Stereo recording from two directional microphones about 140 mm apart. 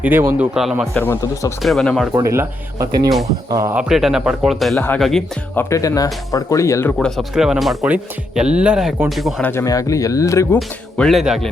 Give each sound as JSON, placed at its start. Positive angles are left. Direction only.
{"t": 0.0, "sound": "speech", "side_deg": -15}
{"t": 0.5, "sound": "speech", "side_deg": -5}
{"t": 0.9, "sound": "speech", "side_deg": 15}
{"t": 1.6, "sound": "speech", "side_deg": 5}
{"t": 2.1, "sound": "speech", "side_deg": -20}
{"t": 3.8, "sound": "speech", "side_deg": -5}
{"t": 5.5, "sound": "speech", "side_deg": 20}
{"t": 7.0, "sound": "speech", "side_deg": 0}
{"t": 9.4, "sound": "speech", "side_deg": 15}
{"t": 10.9, "sound": "speech", "side_deg": 5}